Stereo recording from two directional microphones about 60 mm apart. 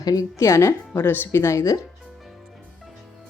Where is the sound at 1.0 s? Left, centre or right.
Left.